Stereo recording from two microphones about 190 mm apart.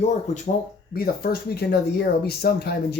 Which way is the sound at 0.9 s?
55° left (ahead or behind).